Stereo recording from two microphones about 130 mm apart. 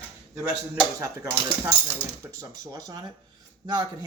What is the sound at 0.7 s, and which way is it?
Speech, 20° right (ahead or behind).